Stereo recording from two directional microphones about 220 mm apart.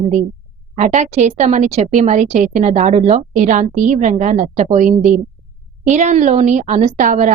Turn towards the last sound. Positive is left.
turn(degrees=-35)  # may be behind; listen again after turning